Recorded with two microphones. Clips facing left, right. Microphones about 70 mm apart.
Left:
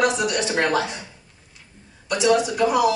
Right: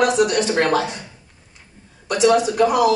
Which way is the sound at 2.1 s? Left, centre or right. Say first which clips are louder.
Right 3 dB; right.